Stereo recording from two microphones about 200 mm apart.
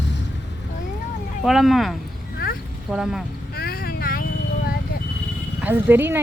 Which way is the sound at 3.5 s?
50° left (ahead or behind).